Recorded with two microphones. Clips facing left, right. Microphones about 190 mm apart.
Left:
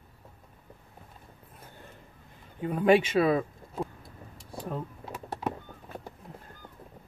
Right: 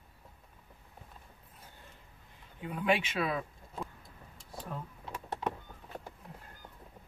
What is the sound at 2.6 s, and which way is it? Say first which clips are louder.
Speech: left 9 dB; 45° left (ahead or behind).